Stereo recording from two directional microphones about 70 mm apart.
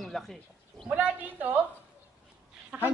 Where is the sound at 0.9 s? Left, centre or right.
Right.